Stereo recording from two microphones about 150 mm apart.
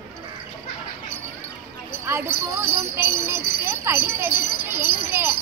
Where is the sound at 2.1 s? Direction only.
15° right (ahead or behind).